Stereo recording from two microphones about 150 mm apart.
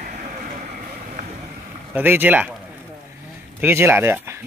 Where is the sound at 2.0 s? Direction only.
10° right (ahead or behind).